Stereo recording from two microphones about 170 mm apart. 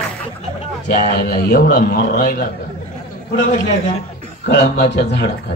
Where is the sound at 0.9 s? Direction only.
60° left (ahead or behind).